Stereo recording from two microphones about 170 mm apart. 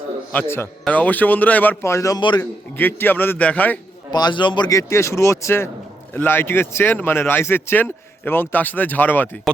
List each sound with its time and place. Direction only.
0.3 s speech: 10° left (ahead or behind)
2.4 s speech: 10° left (ahead or behind)
4.1 s speech: 25° left (ahead or behind)